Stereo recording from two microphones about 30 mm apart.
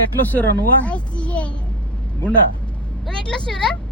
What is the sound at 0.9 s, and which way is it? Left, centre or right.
Speech, left.